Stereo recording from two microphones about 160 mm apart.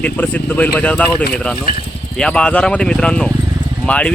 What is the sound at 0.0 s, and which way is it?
Speech, 10° left (ahead or behind).